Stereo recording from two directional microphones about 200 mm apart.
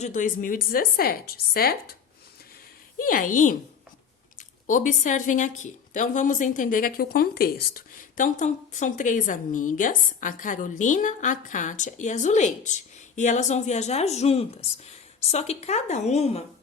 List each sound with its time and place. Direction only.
0.0 s a woman's voice: 40° left (ahead or behind)
3.0 s a woman's voice: 45° left (ahead or behind)
4.6 s a woman's voice: 40° left (ahead or behind)